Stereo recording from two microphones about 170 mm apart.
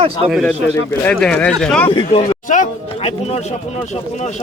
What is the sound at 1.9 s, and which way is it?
Speech, 30° left (ahead or behind).